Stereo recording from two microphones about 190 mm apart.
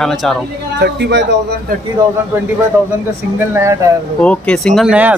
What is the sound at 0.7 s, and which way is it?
Speech, 60° right (ahead or behind).